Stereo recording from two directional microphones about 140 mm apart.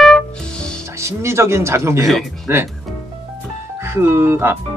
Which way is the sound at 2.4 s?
20° right (ahead or behind).